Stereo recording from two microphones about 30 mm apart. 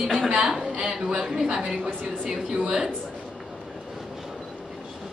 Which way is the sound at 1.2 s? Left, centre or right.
Centre.